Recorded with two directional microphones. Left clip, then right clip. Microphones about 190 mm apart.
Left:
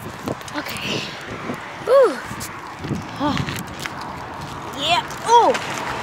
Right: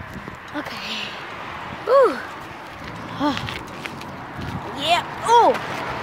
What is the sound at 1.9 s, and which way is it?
Speech, 10° left (ahead or behind).